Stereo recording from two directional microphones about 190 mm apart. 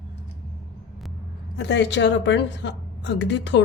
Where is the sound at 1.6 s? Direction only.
65° left (ahead or behind).